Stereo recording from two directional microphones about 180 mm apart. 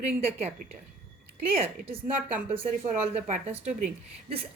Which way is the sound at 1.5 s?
30° right (ahead or behind).